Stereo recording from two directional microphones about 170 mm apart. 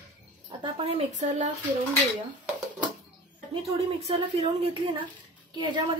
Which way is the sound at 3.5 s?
35° right (ahead or behind).